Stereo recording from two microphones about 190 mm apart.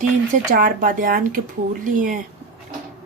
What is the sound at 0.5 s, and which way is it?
Speech, 45° right (ahead or behind).